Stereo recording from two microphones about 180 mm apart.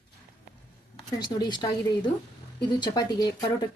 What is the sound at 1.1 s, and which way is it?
Speech, 20° left (ahead or behind).